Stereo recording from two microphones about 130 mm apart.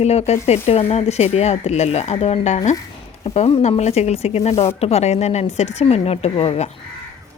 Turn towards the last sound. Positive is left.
turn(degrees=50)  # may be behind; listen again after turning